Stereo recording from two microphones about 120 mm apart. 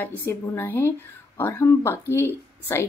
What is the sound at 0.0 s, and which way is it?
A woman's voice, 20° left (ahead or behind).